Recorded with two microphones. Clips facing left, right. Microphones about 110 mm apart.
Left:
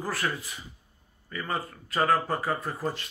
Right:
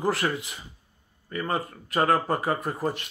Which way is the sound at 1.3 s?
35° right (ahead or behind).